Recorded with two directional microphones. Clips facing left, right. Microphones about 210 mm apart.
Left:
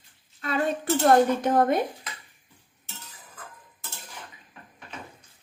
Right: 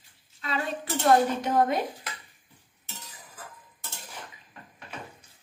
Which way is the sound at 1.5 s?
55° left (ahead or behind).